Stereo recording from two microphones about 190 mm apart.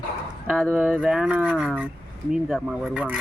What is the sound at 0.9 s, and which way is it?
Speech, 5° right (ahead or behind).